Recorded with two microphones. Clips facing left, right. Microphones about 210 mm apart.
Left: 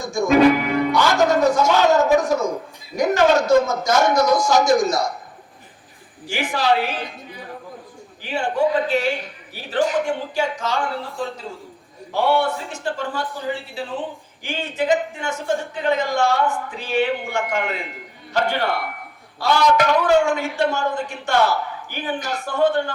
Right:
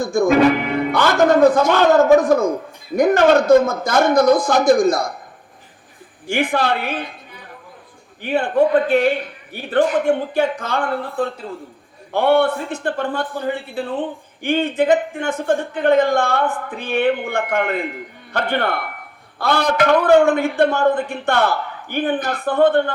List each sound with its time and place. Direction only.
0.0 s a man's voice: 55° right (ahead or behind)
6.2 s a man's voice: 55° right (ahead or behind)
8.2 s a man's voice: 55° right (ahead or behind)